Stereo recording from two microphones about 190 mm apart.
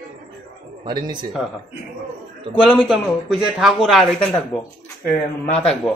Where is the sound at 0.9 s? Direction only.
25° right (ahead or behind).